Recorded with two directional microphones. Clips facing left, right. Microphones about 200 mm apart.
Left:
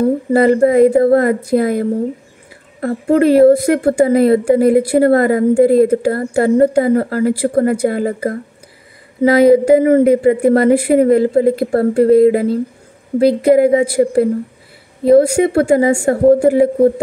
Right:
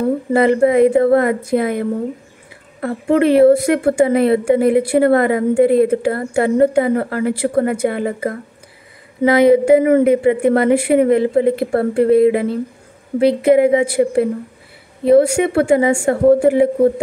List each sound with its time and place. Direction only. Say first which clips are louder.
0.3 s a woman's voice: left 2 dB; 40° left (ahead or behind)